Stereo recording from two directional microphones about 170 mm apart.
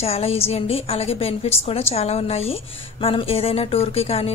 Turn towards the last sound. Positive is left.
turn(degrees=35)  # may be behind; listen again after turning